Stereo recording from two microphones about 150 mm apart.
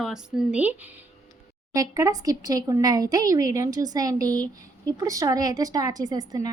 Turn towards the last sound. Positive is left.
turn(degrees=-25)  # may be behind; listen again after turning